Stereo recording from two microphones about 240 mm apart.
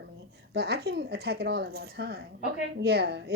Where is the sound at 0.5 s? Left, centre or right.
Right.